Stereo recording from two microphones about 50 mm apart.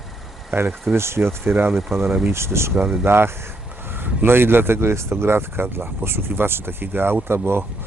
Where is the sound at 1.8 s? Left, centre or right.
Centre.